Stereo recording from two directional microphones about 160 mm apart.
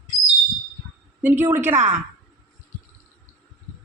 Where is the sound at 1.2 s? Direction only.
10° right (ahead or behind).